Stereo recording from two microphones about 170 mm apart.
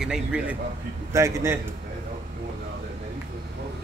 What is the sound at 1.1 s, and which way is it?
Speech, 15° right (ahead or behind).